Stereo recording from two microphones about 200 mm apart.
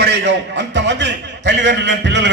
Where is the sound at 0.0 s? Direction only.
60° right (ahead or behind).